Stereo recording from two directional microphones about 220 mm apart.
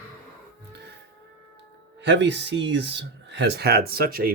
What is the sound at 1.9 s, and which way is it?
Speech, 50° right (ahead or behind).